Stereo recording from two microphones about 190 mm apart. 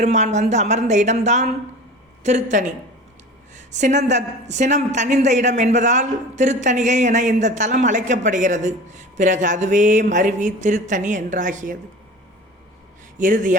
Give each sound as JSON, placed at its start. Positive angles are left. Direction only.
{"t": 0.0, "sound": "a woman's voice", "side_deg": -35}
{"t": 13.1, "sound": "a woman's voice", "side_deg": -40}